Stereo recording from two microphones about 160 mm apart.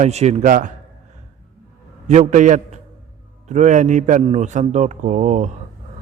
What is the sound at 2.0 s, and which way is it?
A man's voice, 45° right (ahead or behind).